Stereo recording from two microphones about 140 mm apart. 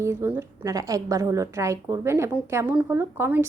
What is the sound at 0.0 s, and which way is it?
A woman's voice, 15° right (ahead or behind).